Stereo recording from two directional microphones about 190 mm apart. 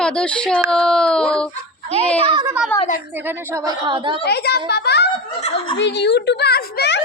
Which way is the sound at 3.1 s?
10° right (ahead or behind).